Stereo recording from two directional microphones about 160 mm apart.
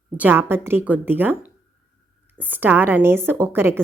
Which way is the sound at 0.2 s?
10° right (ahead or behind).